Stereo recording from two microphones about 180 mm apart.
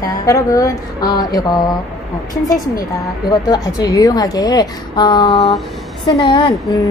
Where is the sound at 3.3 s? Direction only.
20° left (ahead or behind).